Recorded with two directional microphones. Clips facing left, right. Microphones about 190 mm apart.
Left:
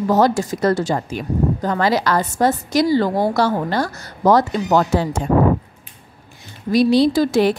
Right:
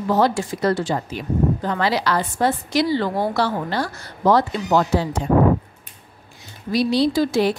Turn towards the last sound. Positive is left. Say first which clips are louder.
# left 3 dB
turn(degrees=50)  # may be behind; listen again after turning